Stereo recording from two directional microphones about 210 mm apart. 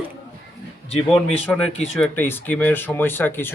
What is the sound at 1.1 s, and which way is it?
Speech, 5° left (ahead or behind).